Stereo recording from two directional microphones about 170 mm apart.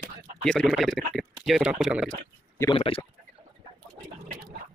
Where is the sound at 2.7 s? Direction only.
35° left (ahead or behind).